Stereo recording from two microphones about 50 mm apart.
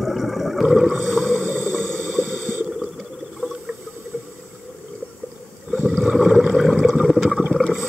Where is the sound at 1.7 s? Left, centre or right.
Centre.